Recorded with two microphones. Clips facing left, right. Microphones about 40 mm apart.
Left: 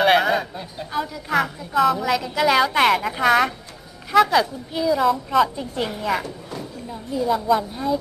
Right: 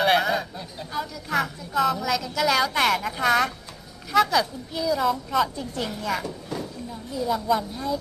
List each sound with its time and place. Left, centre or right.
0.0 s speech: centre
2.0 s speech: centre